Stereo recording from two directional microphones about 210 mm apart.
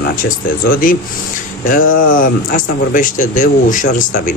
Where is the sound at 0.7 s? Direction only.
40° left (ahead or behind).